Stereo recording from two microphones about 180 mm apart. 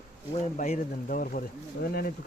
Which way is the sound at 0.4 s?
40° left (ahead or behind).